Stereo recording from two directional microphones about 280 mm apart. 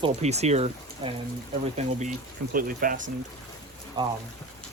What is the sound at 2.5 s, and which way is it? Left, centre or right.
Speech, right.